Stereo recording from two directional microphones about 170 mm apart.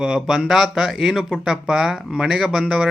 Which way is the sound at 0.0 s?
5° right (ahead or behind).